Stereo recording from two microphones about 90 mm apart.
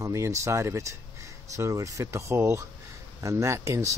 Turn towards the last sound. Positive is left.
turn(degrees=-35)  # may be behind; listen again after turning